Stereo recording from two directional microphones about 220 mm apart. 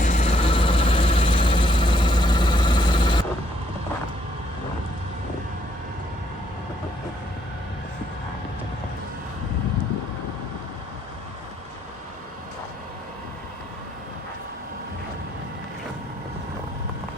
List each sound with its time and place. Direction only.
0.0 s vehicle: 35° left (ahead or behind)